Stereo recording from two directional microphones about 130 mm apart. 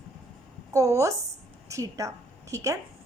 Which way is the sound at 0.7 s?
25° right (ahead or behind).